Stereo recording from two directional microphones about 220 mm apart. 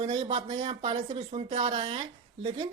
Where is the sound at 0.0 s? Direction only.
30° right (ahead or behind).